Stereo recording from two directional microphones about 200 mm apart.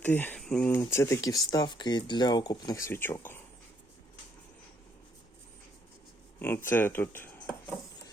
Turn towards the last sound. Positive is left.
turn(degrees=10)  # may be behind; listen again after turning